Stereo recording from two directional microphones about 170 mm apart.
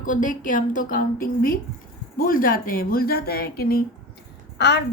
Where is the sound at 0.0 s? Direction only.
50° left (ahead or behind).